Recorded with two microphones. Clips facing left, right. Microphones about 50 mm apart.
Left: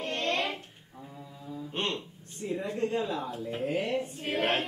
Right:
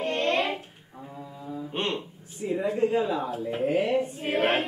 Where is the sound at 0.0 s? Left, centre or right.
Centre.